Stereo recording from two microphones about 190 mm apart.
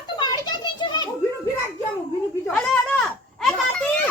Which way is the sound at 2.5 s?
5° left (ahead or behind).